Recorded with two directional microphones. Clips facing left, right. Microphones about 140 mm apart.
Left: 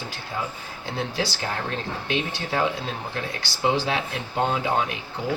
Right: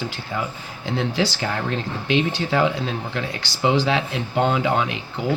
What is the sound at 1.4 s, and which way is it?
Speech, 90° right.